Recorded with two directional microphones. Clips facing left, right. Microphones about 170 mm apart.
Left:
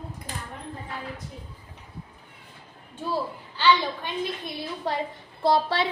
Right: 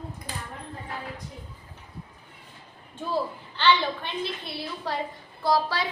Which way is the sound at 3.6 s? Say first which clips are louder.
Left 1 dB; 10° left (ahead or behind).